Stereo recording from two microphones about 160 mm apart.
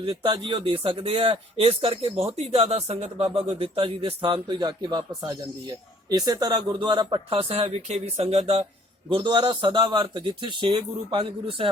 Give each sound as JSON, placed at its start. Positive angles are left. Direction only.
{"t": 0.0, "sound": "a man's voice", "side_deg": -30}